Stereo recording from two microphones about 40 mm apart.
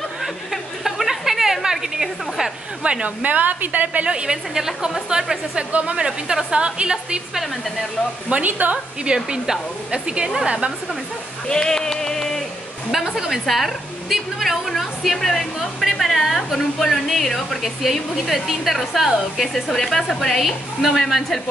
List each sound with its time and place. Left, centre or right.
0.2 s a sound: centre
2.8 s a woman's voice: right
4.0 s speech: right
4.6 s a woman's voice: centre
5.7 s a woman's voice: right
5.9 s speech: centre
8.5 s a woman's voice: right
9.0 s speech: centre
11.4 s a sound: centre
12.9 s a woman's voice: centre
15.8 s a woman's voice: centre
19.5 s a woman's voice: centre